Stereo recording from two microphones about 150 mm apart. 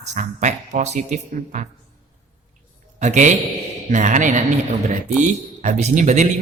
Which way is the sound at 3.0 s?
55° right (ahead or behind).